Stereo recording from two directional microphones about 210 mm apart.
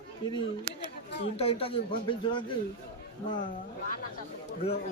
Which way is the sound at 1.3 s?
30° left (ahead or behind).